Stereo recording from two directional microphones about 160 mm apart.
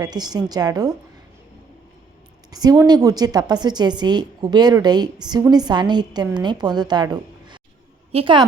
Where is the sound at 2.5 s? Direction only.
25° right (ahead or behind).